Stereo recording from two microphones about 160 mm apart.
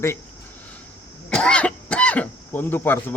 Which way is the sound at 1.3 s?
5° left (ahead or behind).